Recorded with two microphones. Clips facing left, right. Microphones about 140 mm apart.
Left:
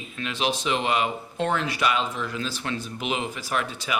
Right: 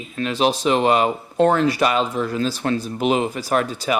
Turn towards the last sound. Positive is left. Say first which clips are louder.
# right 7 dB
turn(degrees=-40)  # may be behind; listen again after turning